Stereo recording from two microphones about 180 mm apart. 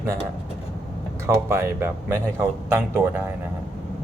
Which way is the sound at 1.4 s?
15° right (ahead or behind).